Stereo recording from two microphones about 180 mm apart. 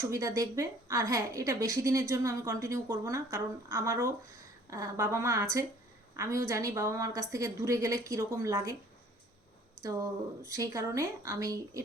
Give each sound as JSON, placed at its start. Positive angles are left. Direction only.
{"t": 0.0, "sound": "a woman's voice", "side_deg": -20}
{"t": 9.8, "sound": "a woman's voice", "side_deg": -20}